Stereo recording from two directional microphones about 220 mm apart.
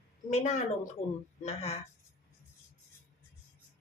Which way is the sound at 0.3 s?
30° left (ahead or behind).